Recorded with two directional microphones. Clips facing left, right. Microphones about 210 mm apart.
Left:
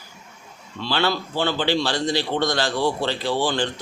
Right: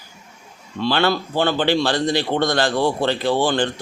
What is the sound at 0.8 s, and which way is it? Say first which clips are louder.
Speech: right 4 dB; 55° right (ahead or behind).